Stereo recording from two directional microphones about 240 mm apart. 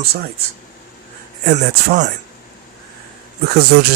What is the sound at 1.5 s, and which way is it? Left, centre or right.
Speech, right.